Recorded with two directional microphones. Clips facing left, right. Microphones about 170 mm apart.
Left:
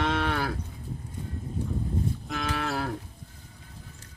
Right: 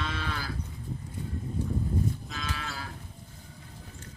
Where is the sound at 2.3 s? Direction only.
65° left (ahead or behind).